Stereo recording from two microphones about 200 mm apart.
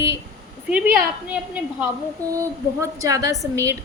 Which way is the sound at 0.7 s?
5° right (ahead or behind).